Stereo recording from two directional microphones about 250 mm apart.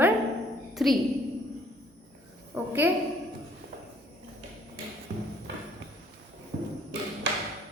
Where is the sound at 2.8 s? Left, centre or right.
Centre.